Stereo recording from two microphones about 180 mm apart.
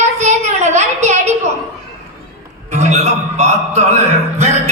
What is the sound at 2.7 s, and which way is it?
A man's voice, 40° right (ahead or behind).